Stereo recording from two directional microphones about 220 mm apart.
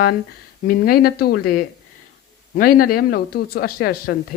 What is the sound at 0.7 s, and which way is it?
Speech, 45° left (ahead or behind).